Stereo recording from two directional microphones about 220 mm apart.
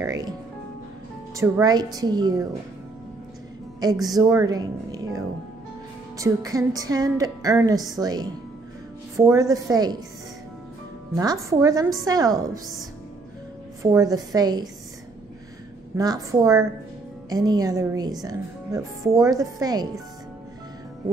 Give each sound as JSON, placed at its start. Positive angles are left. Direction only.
{"t": 0.0, "sound": "music", "side_deg": -15}
{"t": 1.3, "sound": "a woman's voice", "side_deg": -15}
{"t": 3.8, "sound": "a woman's voice", "side_deg": -15}
{"t": 11.1, "sound": "a woman's voice", "side_deg": -15}
{"t": 13.9, "sound": "a woman's voice", "side_deg": -15}
{"t": 16.0, "sound": "a woman's voice", "side_deg": -15}